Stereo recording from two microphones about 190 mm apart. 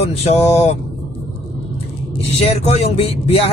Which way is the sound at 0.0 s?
35° left (ahead or behind).